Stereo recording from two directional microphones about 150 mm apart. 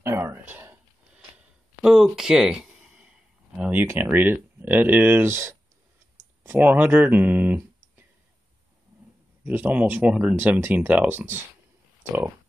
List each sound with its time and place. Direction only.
0.0 s a sound: 15° right (ahead or behind)
1.8 s speech: centre (ahead or behind)
9.4 s speech: 10° right (ahead or behind)